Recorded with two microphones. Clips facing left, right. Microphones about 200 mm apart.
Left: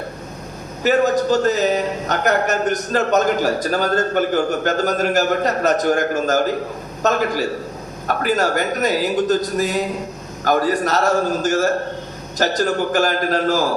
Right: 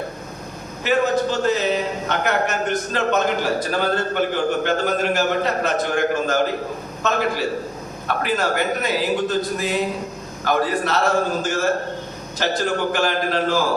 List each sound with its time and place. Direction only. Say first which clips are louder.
0.9 s a man's voice: left 3 dB; 40° left (ahead or behind)